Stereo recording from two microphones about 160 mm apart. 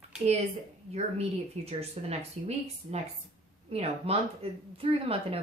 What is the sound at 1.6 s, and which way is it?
Speech, 40° right (ahead or behind).